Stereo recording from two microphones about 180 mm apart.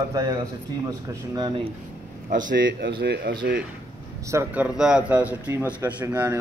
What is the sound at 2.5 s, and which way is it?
Speech, 75° right (ahead or behind).